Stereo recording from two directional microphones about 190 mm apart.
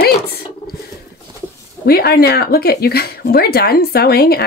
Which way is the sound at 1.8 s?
55° left (ahead or behind).